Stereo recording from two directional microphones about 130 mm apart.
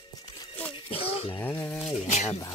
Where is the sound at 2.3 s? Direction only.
25° left (ahead or behind).